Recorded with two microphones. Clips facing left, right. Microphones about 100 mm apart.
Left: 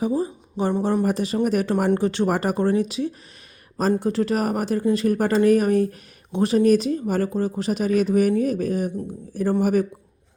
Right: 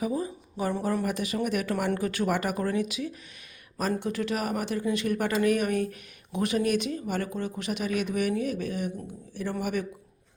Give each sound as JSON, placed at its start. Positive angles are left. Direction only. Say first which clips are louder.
{"t": 0.0, "sound": "speech", "louder": "left 6 dB", "side_deg": 30}